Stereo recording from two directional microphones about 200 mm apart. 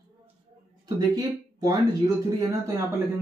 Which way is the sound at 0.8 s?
20° right (ahead or behind).